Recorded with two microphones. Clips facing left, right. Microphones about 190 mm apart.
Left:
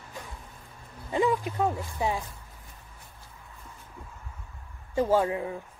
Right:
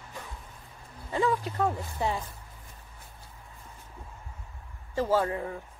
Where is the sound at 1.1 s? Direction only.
15° left (ahead or behind).